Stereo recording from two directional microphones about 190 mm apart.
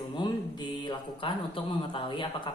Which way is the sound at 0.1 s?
25° left (ahead or behind).